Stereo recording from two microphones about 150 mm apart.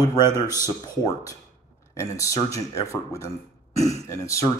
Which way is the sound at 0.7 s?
25° left (ahead or behind).